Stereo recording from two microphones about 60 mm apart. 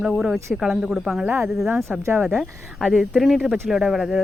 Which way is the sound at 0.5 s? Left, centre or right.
Centre.